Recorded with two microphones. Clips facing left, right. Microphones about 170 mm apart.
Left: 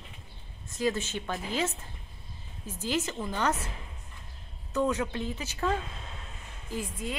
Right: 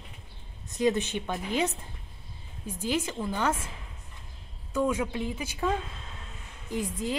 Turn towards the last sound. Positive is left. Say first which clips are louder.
# right 4 dB
turn(degrees=-20)  # may be behind; listen again after turning